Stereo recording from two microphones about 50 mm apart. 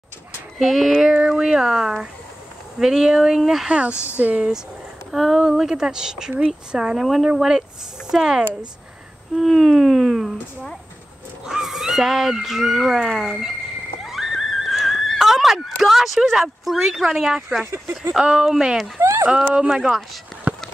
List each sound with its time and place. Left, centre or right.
0.6 s speech: centre
3.7 s speech: right
5.1 s speech: centre
7.0 s speech: centre
14.0 s a sound: centre
18.4 s speech: centre
18.9 s speech: right
19.2 s speech: centre